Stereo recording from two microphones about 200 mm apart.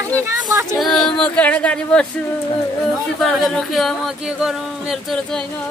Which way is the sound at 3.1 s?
Centre (ahead or behind).